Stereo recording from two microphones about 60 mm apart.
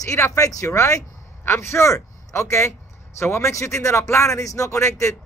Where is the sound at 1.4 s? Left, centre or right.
Left.